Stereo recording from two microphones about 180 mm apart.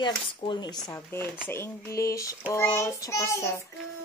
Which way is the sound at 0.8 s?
15° left (ahead or behind).